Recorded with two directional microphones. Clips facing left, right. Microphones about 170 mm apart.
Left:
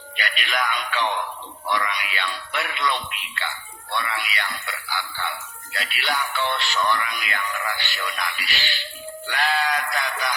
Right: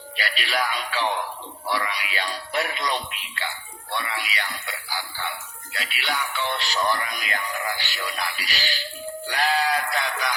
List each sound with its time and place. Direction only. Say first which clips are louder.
0.2 s speech: even; 35° right (ahead or behind)
6.0 s speech: left 2 dB; 10° right (ahead or behind)
6.5 s speech: even; 35° right (ahead or behind)
7.8 s speech: left 1 dB; 10° right (ahead or behind)
8.0 s speech: even; 35° right (ahead or behind)
9.8 s music: right 1 dB; 25° right (ahead or behind)